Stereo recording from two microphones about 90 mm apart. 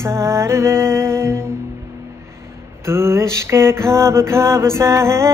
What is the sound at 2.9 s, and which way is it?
Music, 30° right (ahead or behind).